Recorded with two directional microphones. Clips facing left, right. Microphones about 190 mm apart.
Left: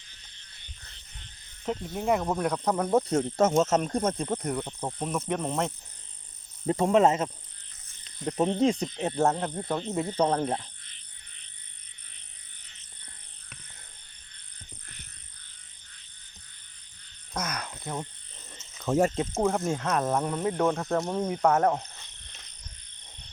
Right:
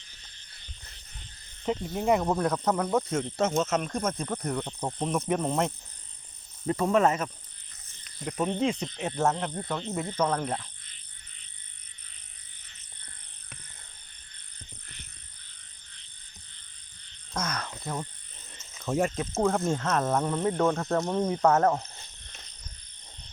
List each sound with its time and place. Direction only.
1.6 s speech: centre (ahead or behind)
2.4 s speech: 10° left (ahead or behind)
2.9 s cricket: 40° left (ahead or behind)
4.5 s speech: 5° left (ahead or behind)
6.7 s speech: 25° left (ahead or behind)
8.0 s cricket: 30° left (ahead or behind)
9.3 s speech: 15° left (ahead or behind)
17.3 s speech: 20° left (ahead or behind)
18.9 s speech: 40° left (ahead or behind)
19.3 s speech: 10° left (ahead or behind)
20.8 s speech: centre (ahead or behind)
21.4 s speech: 10° left (ahead or behind)